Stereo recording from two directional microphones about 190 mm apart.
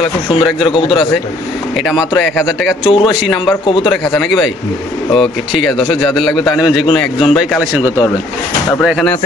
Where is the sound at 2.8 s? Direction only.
30° left (ahead or behind).